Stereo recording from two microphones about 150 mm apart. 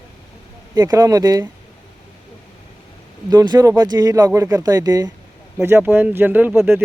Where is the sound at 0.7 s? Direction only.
25° right (ahead or behind).